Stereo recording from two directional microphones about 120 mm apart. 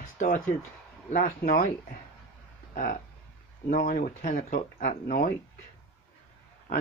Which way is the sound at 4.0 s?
90° left.